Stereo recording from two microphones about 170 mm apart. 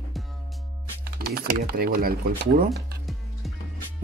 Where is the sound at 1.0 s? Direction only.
65° right (ahead or behind).